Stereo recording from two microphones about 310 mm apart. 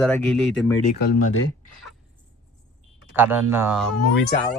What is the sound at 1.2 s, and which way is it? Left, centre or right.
Speech, left.